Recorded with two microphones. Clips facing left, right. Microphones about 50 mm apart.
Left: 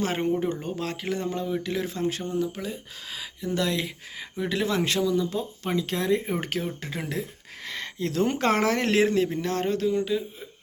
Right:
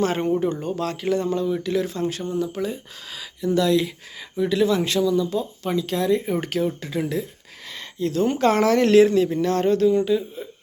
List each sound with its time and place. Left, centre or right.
0.0 s speech: centre
2.6 s speech: centre
3.4 s speech: left
4.4 s speech: left
7.0 s speech: left
7.7 s a sound: left
8.4 s speech: left
9.3 s speech: centre